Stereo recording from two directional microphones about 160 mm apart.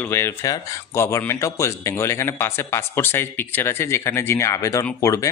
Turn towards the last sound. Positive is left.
turn(degrees=20)  # may be behind; listen again after turning